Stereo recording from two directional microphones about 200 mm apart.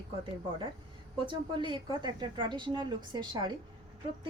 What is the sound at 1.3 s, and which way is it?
A woman's voice, 25° right (ahead or behind).